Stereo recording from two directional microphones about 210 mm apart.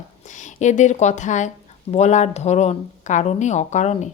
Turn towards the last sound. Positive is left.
turn(degrees=35)  # may be behind; listen again after turning